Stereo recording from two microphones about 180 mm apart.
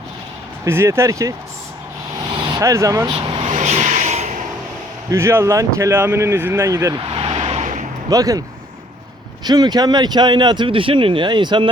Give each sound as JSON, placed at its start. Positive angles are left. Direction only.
{"t": 0.6, "sound": "speech", "side_deg": -15}
{"t": 2.3, "sound": "speech", "side_deg": -25}
{"t": 3.1, "sound": "vehicle", "side_deg": -30}
{"t": 5.1, "sound": "speech", "side_deg": -15}
{"t": 7.0, "sound": "vehicle", "side_deg": -30}
{"t": 8.1, "sound": "speech", "side_deg": -20}
{"t": 9.4, "sound": "speech", "side_deg": -20}